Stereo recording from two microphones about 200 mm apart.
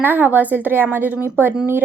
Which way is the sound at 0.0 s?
10° right (ahead or behind).